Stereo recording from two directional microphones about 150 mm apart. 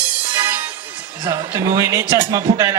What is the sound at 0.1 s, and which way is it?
Music, 15° right (ahead or behind).